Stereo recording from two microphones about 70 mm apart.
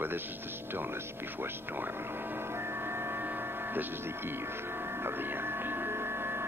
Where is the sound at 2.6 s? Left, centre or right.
Right.